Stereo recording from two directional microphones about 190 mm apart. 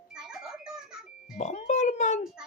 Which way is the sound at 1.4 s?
35° left (ahead or behind).